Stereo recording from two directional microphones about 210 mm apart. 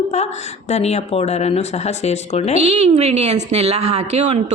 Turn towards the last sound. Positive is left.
turn(degrees=-30)  # may be behind; listen again after turning